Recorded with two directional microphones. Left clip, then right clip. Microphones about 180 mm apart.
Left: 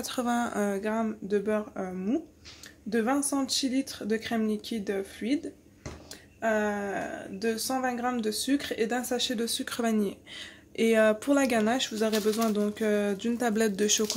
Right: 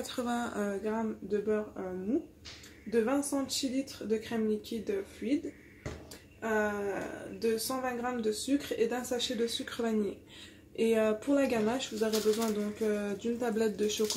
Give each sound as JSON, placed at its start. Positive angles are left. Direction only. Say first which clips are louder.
{"t": 0.0, "sound": "speech", "louder": "left 5 dB", "side_deg": 50}
{"t": 2.9, "sound": "speech", "louder": "left 2 dB", "side_deg": 65}
{"t": 6.4, "sound": "speech", "louder": "left 4 dB", "side_deg": 60}